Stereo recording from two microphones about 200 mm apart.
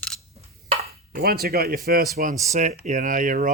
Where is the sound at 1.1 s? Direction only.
50° right (ahead or behind).